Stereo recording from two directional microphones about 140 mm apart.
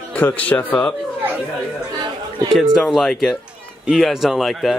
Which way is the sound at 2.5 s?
5° right (ahead or behind).